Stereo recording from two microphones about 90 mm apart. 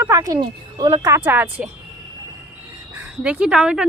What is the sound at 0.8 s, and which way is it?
Speech, 50° right (ahead or behind).